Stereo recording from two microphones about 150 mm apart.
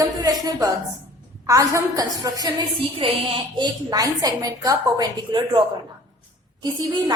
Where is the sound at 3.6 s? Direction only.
25° right (ahead or behind).